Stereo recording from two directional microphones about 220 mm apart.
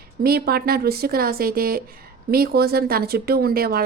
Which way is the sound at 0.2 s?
45° right (ahead or behind).